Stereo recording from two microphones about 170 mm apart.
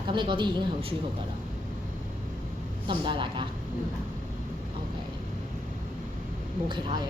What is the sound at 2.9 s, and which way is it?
Speech, 30° right (ahead or behind).